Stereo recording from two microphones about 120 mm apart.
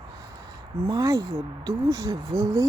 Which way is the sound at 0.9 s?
30° right (ahead or behind).